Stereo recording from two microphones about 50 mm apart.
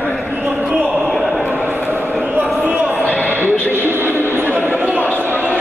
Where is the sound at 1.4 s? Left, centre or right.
Right.